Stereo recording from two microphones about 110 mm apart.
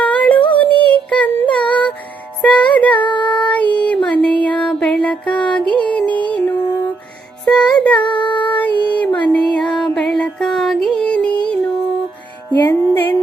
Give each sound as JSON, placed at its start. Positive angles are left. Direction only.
{"t": 0.0, "sound": "music", "side_deg": 10}
{"t": 0.9, "sound": "child singing", "side_deg": 10}
{"t": 1.5, "sound": "music", "side_deg": 10}
{"t": 8.0, "sound": "a sound", "side_deg": 15}
{"t": 9.2, "sound": "music", "side_deg": 10}